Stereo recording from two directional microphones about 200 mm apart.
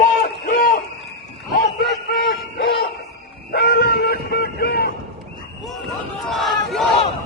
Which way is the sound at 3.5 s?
55° left (ahead or behind).